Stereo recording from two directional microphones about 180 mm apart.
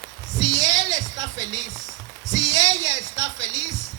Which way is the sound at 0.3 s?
20° right (ahead or behind).